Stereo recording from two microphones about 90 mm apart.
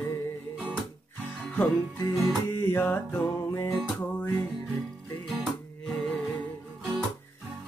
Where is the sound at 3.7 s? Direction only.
Centre (ahead or behind).